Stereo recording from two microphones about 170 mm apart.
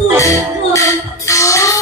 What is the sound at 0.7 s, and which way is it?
Music, 20° left (ahead or behind).